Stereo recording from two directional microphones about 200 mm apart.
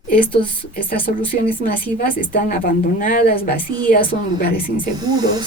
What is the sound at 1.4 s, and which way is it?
Speech, 45° left (ahead or behind).